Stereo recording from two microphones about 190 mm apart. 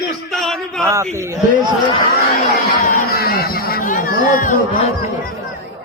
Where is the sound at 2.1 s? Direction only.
55° left (ahead or behind).